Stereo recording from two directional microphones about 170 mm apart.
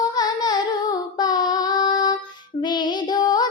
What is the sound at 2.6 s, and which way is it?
Music, 25° left (ahead or behind).